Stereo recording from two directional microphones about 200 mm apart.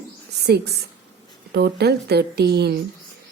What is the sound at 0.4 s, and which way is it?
A woman's voice, 55° right (ahead or behind).